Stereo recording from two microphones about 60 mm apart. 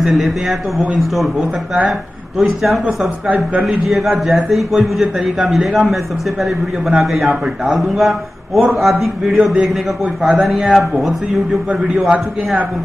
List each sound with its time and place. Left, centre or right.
0.0 s a man's voice: centre
3.3 s a man's voice: right
3.9 s a man's voice: centre